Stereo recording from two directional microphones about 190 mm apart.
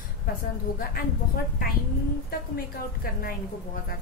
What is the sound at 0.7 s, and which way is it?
A woman's voice, 50° left (ahead or behind).